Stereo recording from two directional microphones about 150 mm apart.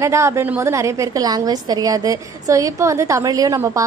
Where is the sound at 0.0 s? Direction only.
20° right (ahead or behind).